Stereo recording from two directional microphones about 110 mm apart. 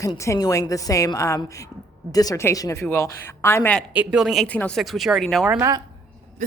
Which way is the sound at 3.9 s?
10° right (ahead or behind).